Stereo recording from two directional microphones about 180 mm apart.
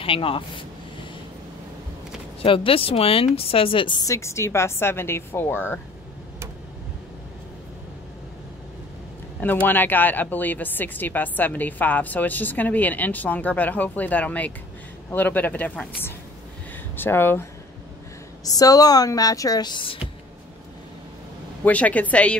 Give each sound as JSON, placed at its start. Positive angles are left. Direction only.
{"t": 0.0, "sound": "speech", "side_deg": 30}
{"t": 2.4, "sound": "a woman's voice", "side_deg": 30}
{"t": 9.4, "sound": "a woman's voice", "side_deg": 10}
{"t": 21.6, "sound": "a woman's voice", "side_deg": 10}